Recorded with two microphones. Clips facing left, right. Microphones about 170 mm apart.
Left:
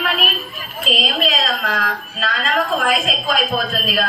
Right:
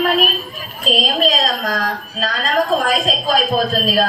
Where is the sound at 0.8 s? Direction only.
40° right (ahead or behind).